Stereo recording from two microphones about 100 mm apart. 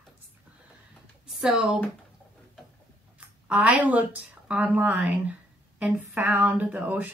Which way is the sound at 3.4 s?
15° right (ahead or behind).